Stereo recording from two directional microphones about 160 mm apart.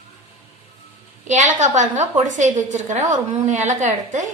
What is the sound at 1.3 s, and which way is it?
A woman's voice, 50° right (ahead or behind).